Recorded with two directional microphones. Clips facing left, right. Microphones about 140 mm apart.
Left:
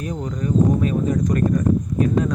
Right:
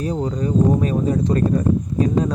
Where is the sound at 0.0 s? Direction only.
35° right (ahead or behind).